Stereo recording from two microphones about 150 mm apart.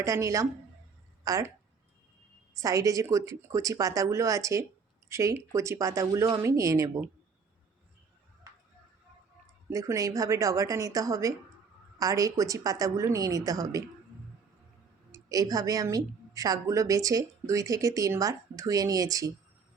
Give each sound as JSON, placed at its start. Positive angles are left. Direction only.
{"t": 0.0, "sound": "a woman's voice", "side_deg": -20}
{"t": 2.6, "sound": "a woman's voice", "side_deg": -20}
{"t": 9.6, "sound": "a woman's voice", "side_deg": -20}
{"t": 15.1, "sound": "a woman's voice", "side_deg": -25}